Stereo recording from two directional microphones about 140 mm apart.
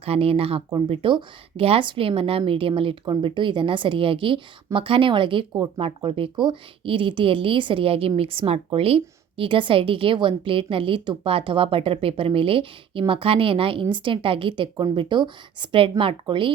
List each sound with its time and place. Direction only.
0.0 s speech: 45° right (ahead or behind)